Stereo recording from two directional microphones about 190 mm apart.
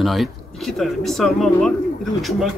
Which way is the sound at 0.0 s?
Centre (ahead or behind).